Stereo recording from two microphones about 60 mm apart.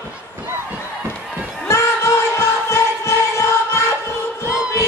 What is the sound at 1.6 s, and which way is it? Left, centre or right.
Music, left.